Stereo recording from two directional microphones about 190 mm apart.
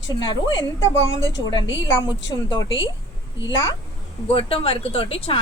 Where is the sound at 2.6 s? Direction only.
80° left.